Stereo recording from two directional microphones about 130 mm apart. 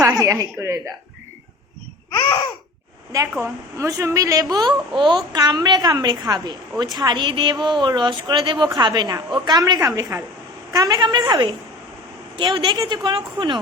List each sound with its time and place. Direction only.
0.0 s speech: 25° right (ahead or behind)
3.4 s a woman's voice: 25° right (ahead or behind)
4.9 s a woman's voice: 40° right (ahead or behind)